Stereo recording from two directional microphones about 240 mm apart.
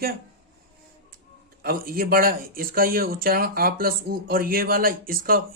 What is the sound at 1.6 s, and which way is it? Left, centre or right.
Speech, right.